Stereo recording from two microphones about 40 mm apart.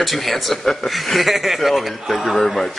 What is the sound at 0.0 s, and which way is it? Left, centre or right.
Speech, centre.